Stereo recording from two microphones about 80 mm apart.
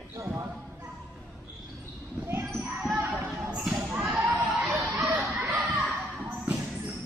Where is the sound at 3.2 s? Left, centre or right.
Centre.